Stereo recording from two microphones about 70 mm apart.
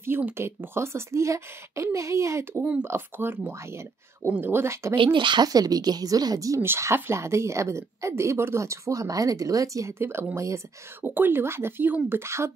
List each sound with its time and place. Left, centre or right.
0.0 s speech: right
2.8 s speech: right
5.3 s speech: right
6.6 s a woman's voice: right
9.9 s speech: right
11.0 s speech: right